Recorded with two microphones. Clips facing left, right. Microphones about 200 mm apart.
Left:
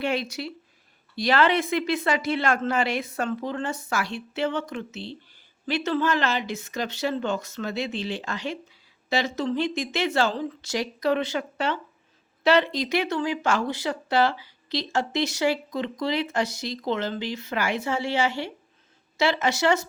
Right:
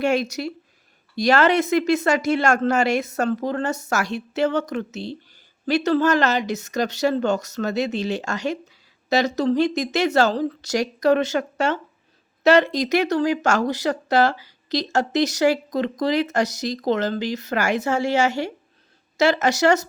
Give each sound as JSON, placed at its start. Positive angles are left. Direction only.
{"t": 0.0, "sound": "speech", "side_deg": -45}